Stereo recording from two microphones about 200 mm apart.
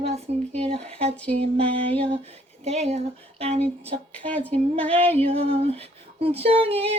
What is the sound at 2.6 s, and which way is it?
Speech, 35° right (ahead or behind).